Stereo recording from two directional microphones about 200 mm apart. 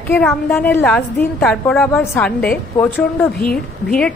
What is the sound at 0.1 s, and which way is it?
A woman's voice, 10° left (ahead or behind).